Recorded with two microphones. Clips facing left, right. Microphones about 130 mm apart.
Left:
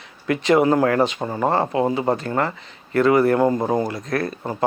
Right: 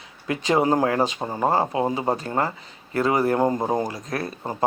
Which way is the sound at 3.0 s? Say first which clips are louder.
Left 4 dB; 15° right (ahead or behind).